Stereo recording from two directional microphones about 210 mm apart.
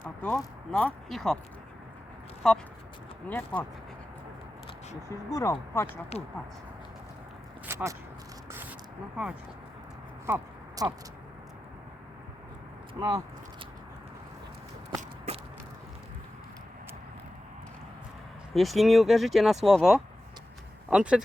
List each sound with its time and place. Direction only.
0.2 s speech: 5° left (ahead or behind)
2.4 s speech: centre (ahead or behind)
5.3 s speech: 15° left (ahead or behind)
6.1 s speech: 30° left (ahead or behind)
7.7 s a sound: 10° right (ahead or behind)
10.2 s a sound: 15° right (ahead or behind)
12.9 s speech: 15° right (ahead or behind)
14.8 s walk: 20° right (ahead or behind)
18.5 s speech: centre (ahead or behind)